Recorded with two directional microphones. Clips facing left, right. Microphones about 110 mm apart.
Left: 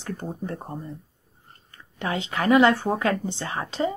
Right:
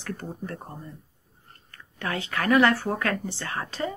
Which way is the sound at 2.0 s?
20° left (ahead or behind).